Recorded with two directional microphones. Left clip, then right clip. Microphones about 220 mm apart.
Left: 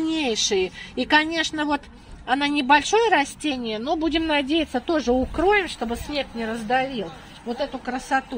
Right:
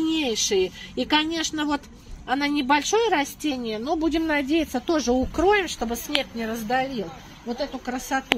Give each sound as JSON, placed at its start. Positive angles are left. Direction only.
{"t": 0.0, "sound": "a woman's voice", "side_deg": 5}